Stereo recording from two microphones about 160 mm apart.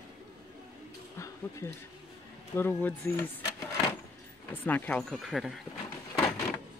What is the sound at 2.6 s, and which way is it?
Speech, 10° left (ahead or behind).